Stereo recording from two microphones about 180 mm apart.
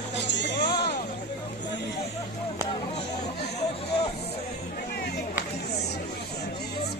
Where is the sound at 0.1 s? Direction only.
80° left.